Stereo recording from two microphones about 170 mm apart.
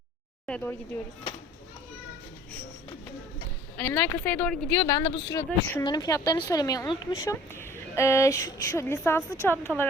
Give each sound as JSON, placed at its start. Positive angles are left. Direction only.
{"t": 0.4, "sound": "speech", "side_deg": 10}
{"t": 3.8, "sound": "speech", "side_deg": 15}
{"t": 4.7, "sound": "speech", "side_deg": 20}
{"t": 5.5, "sound": "speech", "side_deg": 10}
{"t": 5.8, "sound": "speech", "side_deg": 25}